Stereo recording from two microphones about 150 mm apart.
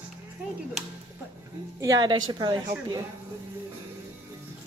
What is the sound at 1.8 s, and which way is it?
Speech, 25° right (ahead or behind).